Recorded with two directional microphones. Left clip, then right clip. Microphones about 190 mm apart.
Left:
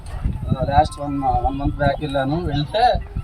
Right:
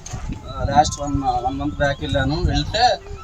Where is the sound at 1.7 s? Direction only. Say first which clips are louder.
Left 1 dB; centre (ahead or behind).